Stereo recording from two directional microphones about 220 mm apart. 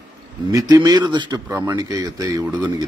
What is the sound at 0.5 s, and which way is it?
Speech, 15° right (ahead or behind).